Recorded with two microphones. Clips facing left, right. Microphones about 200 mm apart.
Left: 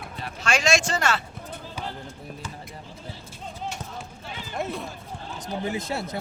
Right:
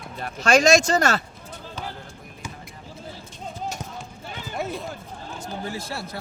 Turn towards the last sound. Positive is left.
turn(degrees=20)  # may be behind; listen again after turning